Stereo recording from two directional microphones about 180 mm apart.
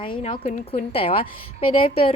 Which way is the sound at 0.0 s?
30° left (ahead or behind).